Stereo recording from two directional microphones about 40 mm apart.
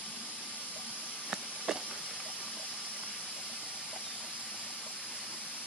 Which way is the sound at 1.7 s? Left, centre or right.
Centre.